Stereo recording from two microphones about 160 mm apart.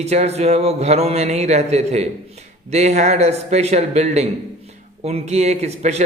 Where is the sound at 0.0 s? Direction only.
45° right (ahead or behind).